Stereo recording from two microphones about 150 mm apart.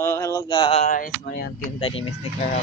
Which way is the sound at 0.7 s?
55° left (ahead or behind).